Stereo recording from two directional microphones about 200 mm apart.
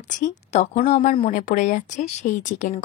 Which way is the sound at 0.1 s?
35° left (ahead or behind).